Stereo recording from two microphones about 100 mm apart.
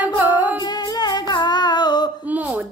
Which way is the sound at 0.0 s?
15° right (ahead or behind).